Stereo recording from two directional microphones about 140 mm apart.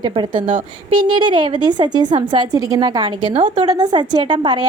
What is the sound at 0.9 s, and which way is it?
A woman's voice, 30° right (ahead or behind).